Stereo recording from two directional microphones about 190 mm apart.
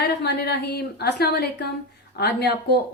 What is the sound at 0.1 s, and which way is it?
A woman's voice, 60° left (ahead or behind).